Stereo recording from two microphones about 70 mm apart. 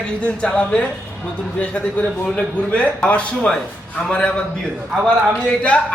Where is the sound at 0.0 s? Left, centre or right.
Centre.